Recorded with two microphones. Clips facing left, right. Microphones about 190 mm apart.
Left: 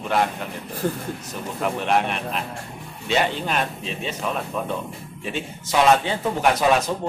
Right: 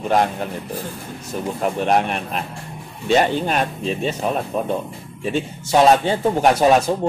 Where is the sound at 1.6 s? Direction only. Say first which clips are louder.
Right 3 dB; 40° right (ahead or behind).